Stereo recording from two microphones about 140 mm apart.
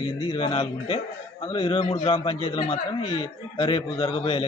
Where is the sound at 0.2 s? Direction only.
35° left (ahead or behind).